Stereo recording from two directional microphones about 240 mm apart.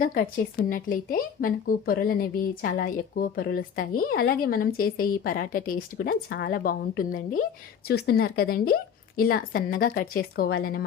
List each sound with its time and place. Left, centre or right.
0.0 s speech: left